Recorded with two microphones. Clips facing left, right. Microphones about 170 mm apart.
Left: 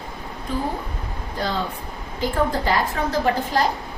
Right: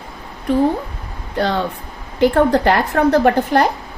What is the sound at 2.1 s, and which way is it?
A woman's voice, 70° right (ahead or behind).